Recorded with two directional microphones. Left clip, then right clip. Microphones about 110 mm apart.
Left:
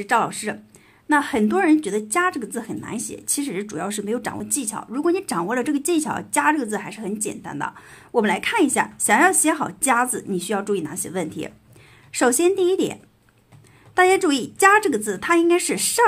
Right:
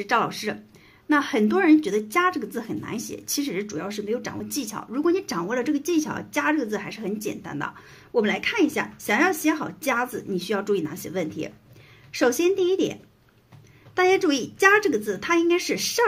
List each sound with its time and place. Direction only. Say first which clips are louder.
0.0 s speech: left 3 dB; 25° left (ahead or behind)
3.6 s a woman's voice: left 3 dB; 45° left (ahead or behind)
4.6 s speech: left 1 dB; 30° left (ahead or behind)
5.5 s speech: left 2 dB; 40° left (ahead or behind)
7.9 s a woman's voice: left 3 dB; 40° left (ahead or behind)
10.5 s speech: left 1 dB; 25° left (ahead or behind)
11.0 s a woman's voice: left 1 dB; 40° left (ahead or behind)